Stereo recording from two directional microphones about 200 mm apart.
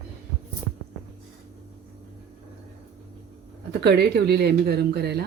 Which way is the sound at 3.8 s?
55° right (ahead or behind).